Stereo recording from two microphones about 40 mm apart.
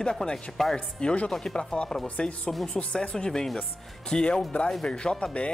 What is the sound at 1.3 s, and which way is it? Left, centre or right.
Speech, centre.